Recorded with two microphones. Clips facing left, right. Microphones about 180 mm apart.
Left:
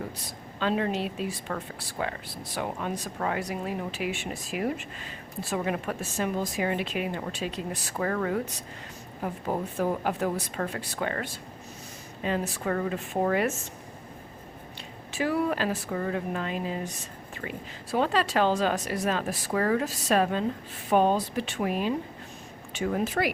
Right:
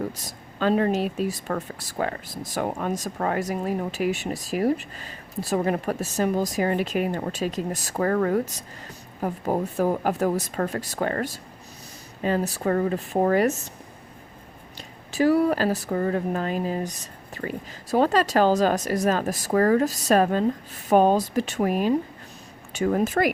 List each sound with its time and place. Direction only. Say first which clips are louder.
0.2 s speech: right 5 dB; 45° right (ahead or behind)
15.1 s speech: right 7 dB; 40° right (ahead or behind)